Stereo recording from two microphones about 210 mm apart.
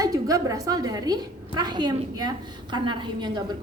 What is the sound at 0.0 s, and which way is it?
A woman's voice, 15° right (ahead or behind).